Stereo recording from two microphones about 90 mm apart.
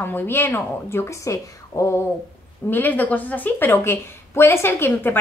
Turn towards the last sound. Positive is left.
turn(degrees=25)  # may be behind; listen again after turning